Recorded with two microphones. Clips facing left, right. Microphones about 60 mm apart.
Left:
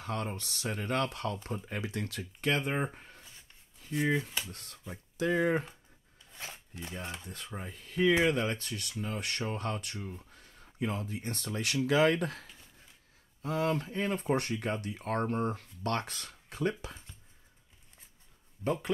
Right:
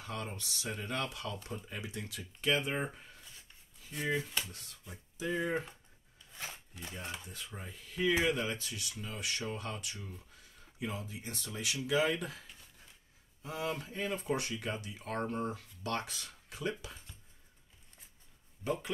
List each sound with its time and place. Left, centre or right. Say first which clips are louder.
0.0 s speech: left 5 dB; left
1.7 s speech: left 6 dB; left
4.5 s speech: left 5 dB; left
6.4 s shuffling cards: left 2 dB; centre
6.9 s speech: left 2 dB; left
7.2 s speech: left 4 dB; left
18.6 s speech: left 3 dB; left